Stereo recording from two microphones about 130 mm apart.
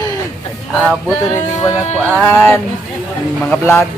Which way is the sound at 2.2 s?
15° left (ahead or behind).